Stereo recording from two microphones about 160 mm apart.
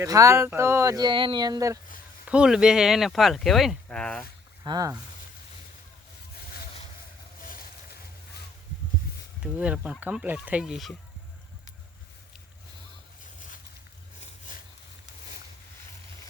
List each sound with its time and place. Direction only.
0.0 s speech: 20° right (ahead or behind)
2.2 s speech: 5° right (ahead or behind)
4.6 s speech: 25° right (ahead or behind)
9.4 s speech: 5° right (ahead or behind)